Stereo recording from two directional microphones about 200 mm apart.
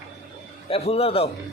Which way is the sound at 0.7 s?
30° left (ahead or behind).